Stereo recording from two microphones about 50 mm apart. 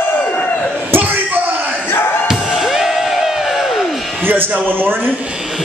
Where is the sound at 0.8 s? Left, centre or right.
Right.